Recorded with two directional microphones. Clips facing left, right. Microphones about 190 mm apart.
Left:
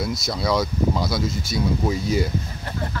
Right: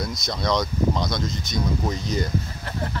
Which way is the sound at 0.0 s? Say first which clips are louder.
Left 2 dB; 5° left (ahead or behind).